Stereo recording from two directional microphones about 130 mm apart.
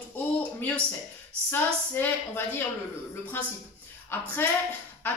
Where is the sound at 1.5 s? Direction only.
15° left (ahead or behind).